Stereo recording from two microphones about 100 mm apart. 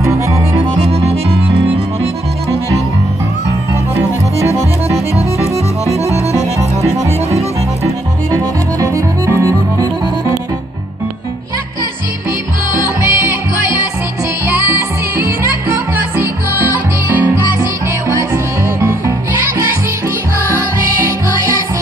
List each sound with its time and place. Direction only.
0.0 s accordion: 30° right (ahead or behind)
0.8 s accordion: 80° right
6.8 s music: 30° right (ahead or behind)
13.0 s music: 20° right (ahead or behind)
18.1 s music: 30° right (ahead or behind)